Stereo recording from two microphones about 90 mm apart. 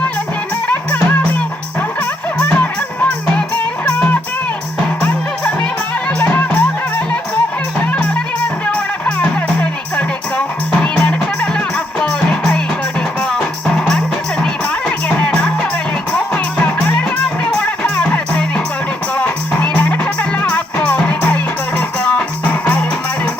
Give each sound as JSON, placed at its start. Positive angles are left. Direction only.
{"t": 2.0, "sound": "music", "side_deg": 20}
{"t": 3.8, "sound": "music", "side_deg": 20}
{"t": 7.8, "sound": "music", "side_deg": 20}